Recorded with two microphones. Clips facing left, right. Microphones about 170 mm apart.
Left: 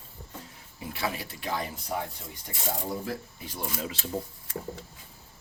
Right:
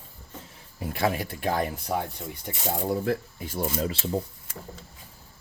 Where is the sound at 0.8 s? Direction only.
50° right (ahead or behind).